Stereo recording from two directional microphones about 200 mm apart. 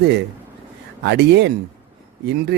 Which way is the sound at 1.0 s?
60° right (ahead or behind).